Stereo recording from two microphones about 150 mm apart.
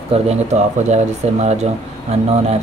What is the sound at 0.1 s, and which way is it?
Speech, 45° right (ahead or behind).